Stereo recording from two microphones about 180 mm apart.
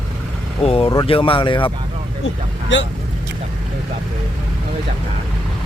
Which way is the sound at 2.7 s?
90° left.